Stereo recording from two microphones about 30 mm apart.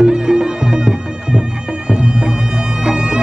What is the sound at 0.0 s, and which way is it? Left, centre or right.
Music, right.